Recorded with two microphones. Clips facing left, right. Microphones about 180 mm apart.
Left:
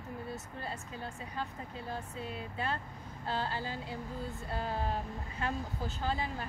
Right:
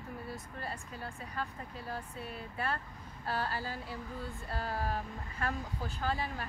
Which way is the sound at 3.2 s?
20° left (ahead or behind).